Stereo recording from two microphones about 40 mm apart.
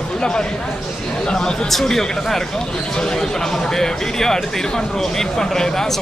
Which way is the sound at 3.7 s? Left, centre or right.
Centre.